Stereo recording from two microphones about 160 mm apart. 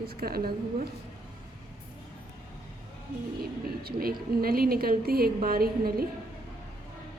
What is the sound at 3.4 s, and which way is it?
A woman's voice, 70° right (ahead or behind).